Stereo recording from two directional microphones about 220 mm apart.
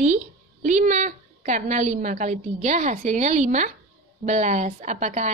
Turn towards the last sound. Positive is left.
turn(degrees=-30)  # may be behind; listen again after turning